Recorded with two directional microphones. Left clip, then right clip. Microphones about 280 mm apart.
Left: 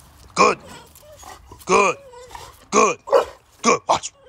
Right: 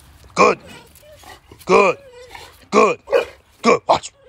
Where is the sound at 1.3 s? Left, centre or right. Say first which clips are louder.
Right 3 dB; centre.